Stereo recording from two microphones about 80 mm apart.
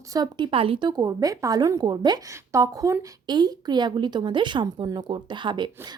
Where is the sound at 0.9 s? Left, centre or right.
Right.